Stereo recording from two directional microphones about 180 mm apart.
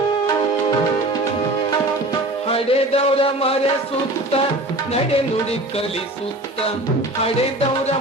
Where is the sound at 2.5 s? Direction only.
35° left (ahead or behind).